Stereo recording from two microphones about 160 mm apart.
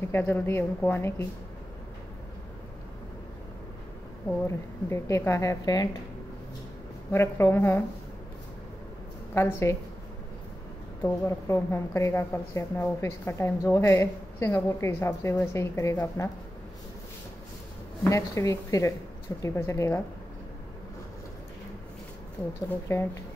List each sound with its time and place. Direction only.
0.1 s a woman's voice: 15° left (ahead or behind)
4.5 s a woman's voice: 15° left (ahead or behind)
7.1 s a woman's voice: 15° left (ahead or behind)
9.3 s a woman's voice: 15° left (ahead or behind)
11.2 s a woman's voice: 15° left (ahead or behind)
18.1 s a woman's voice: 20° left (ahead or behind)
22.7 s a woman's voice: 15° left (ahead or behind)